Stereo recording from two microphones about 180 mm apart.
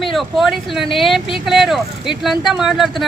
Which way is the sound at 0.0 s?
Centre (ahead or behind).